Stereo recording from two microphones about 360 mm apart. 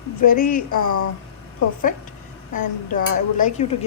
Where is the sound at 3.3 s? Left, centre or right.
Left.